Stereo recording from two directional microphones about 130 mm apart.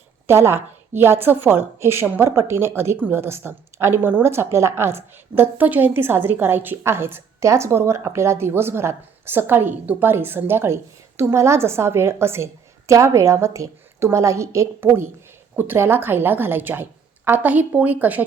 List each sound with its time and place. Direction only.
0.3 s a woman's voice: 20° right (ahead or behind)